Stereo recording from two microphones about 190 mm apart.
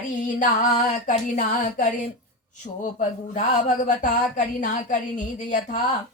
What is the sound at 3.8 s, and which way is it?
A woman's voice, 45° left (ahead or behind).